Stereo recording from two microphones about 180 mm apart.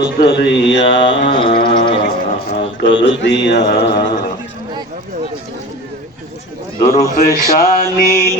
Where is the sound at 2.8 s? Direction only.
90° left.